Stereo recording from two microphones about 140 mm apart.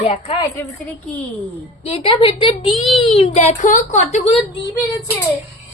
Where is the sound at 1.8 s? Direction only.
40° left (ahead or behind).